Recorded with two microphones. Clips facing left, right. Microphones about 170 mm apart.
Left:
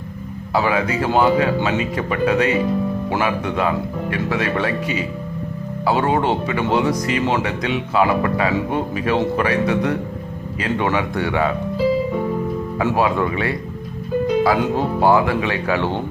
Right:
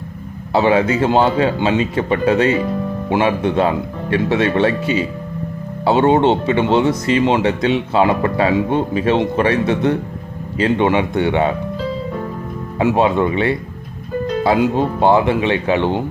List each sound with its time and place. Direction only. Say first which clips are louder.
0.5 s speech: right 5 dB; 30° right (ahead or behind)
12.8 s speech: right 4 dB; 25° right (ahead or behind)
14.8 s speech: right 2 dB; 20° right (ahead or behind)